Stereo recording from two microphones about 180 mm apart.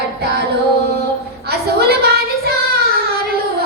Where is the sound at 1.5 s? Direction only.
60° right (ahead or behind).